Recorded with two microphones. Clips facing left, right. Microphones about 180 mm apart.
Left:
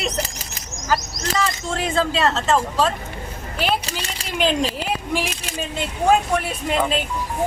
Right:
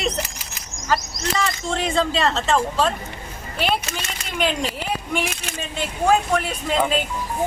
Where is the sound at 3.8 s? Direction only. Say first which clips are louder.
Left 1 dB; 35° left (ahead or behind).